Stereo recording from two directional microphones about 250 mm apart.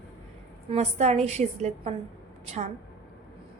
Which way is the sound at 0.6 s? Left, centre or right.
Right.